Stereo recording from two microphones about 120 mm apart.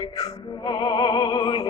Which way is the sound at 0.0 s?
30° left (ahead or behind).